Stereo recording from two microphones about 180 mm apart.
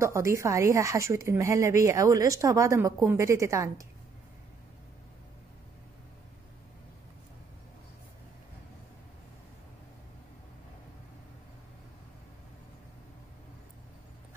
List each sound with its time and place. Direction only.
0.0 s a woman's voice: 15° right (ahead or behind)